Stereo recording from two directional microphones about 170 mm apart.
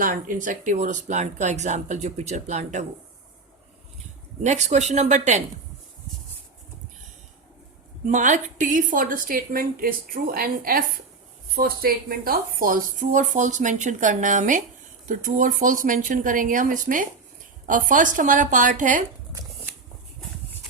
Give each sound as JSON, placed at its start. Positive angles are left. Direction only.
{"t": 0.0, "sound": "speech", "side_deg": -50}
{"t": 4.4, "sound": "speech", "side_deg": -45}
{"t": 8.0, "sound": "a woman's voice", "side_deg": -45}